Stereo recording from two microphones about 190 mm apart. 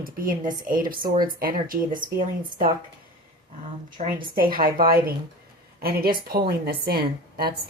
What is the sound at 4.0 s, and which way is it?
Speech, 35° right (ahead or behind).